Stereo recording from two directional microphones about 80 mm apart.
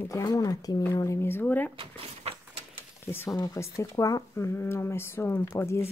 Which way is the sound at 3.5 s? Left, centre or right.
Left.